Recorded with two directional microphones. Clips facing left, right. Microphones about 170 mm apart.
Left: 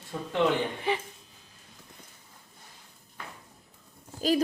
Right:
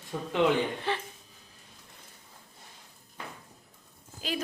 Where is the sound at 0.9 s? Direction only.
15° left (ahead or behind).